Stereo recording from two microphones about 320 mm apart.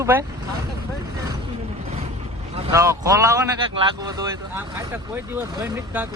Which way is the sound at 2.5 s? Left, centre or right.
Centre.